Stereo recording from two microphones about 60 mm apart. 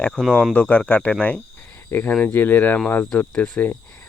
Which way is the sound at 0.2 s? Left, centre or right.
Centre.